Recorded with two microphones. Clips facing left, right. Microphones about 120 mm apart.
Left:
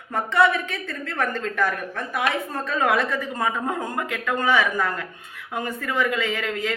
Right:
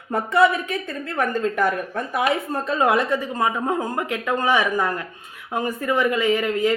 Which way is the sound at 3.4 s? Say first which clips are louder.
Right 2 dB; 15° right (ahead or behind).